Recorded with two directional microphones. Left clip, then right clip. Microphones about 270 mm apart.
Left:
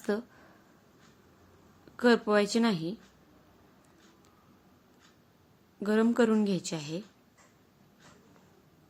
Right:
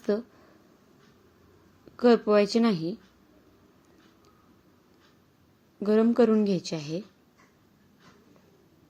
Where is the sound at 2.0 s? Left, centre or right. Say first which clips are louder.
Right 4 dB; centre.